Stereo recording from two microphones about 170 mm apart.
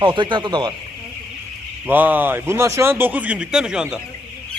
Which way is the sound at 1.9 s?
10° right (ahead or behind).